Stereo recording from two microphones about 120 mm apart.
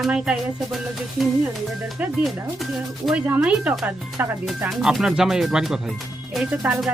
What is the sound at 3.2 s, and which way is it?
Speech, 10° right (ahead or behind).